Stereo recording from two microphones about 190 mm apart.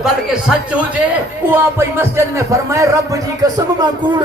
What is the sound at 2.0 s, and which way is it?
Speech, 15° right (ahead or behind).